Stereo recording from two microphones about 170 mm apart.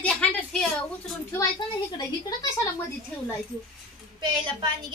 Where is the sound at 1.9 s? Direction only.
20° left (ahead or behind).